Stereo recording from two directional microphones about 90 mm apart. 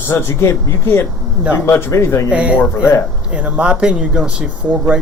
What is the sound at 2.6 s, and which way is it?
Speech, 30° left (ahead or behind).